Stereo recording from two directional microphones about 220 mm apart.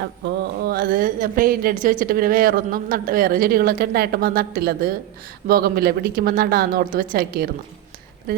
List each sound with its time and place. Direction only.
0.6 s a woman's voice: 45° right (ahead or behind)